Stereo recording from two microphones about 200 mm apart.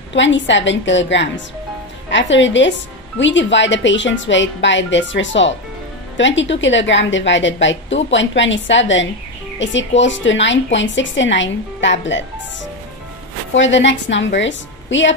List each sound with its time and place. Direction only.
0.1 s a woman's voice: 65° left (ahead or behind)
13.6 s a woman's voice: 65° left (ahead or behind)